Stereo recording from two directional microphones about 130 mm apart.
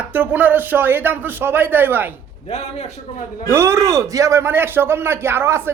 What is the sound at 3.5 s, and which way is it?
A man's voice, 20° right (ahead or behind).